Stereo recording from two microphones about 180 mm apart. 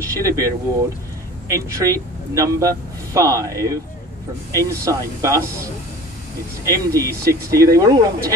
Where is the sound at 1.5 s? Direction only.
20° right (ahead or behind).